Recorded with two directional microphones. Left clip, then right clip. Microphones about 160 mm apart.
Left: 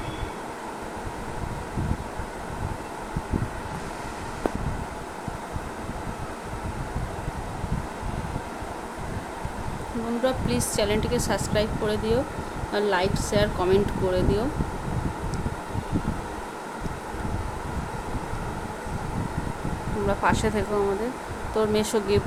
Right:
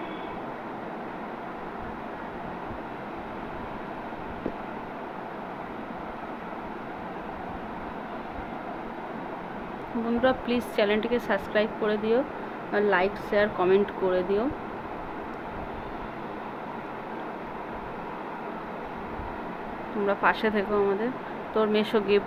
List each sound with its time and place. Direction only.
10.2 s speech: 20° left (ahead or behind)
20.1 s speech: 15° left (ahead or behind)